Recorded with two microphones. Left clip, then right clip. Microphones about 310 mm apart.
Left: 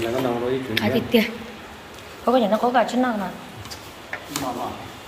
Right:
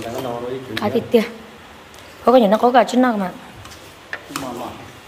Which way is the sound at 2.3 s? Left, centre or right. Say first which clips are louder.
Right 6 dB; centre.